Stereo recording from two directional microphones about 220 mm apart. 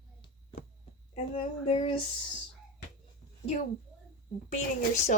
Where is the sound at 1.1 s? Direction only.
25° left (ahead or behind).